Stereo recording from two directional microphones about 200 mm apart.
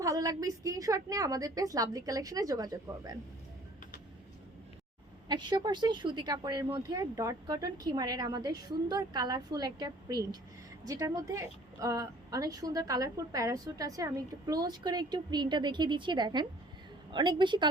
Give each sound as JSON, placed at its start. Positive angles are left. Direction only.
{"t": 0.0, "sound": "a woman's voice", "side_deg": -15}
{"t": 5.3, "sound": "a woman's voice", "side_deg": -20}